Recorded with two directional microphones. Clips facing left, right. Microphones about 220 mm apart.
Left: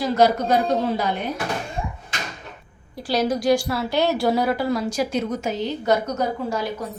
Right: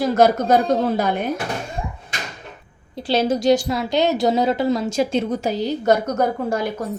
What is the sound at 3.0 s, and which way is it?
A woman's voice, 25° right (ahead or behind).